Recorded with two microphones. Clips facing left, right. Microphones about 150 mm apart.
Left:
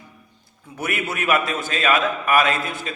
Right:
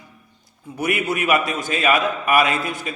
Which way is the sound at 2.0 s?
15° right (ahead or behind).